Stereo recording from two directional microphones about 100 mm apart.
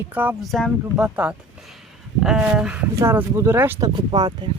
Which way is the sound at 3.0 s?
25° right (ahead or behind).